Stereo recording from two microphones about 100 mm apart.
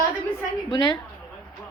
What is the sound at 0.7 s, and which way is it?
Speech, 50° left (ahead or behind).